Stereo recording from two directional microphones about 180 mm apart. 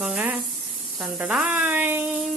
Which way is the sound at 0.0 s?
5° right (ahead or behind).